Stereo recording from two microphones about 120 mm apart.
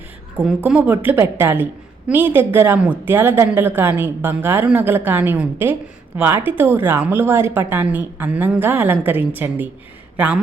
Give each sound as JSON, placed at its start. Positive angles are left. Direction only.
{"t": 0.4, "sound": "a woman's voice", "side_deg": -10}